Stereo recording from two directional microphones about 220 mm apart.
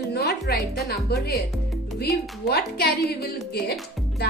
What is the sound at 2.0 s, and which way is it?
A woman's voice, 45° left (ahead or behind).